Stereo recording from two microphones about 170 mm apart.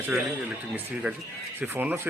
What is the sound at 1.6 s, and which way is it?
Speech, 10° right (ahead or behind).